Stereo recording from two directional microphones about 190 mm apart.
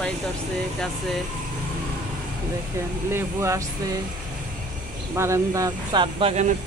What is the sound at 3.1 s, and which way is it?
Speech, 15° right (ahead or behind).